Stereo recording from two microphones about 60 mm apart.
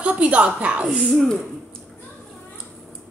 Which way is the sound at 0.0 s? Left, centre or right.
Right.